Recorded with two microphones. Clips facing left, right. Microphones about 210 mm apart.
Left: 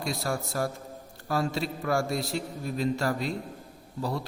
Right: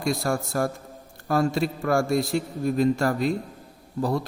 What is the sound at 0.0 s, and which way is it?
A man's voice, 50° right (ahead or behind).